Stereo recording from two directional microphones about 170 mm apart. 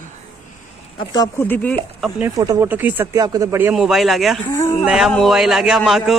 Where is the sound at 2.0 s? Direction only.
10° right (ahead or behind).